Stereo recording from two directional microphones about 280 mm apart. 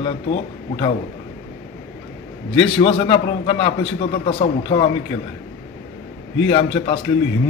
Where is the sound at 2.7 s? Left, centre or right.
Centre.